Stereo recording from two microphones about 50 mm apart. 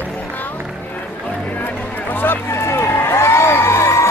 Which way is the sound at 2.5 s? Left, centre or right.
Left.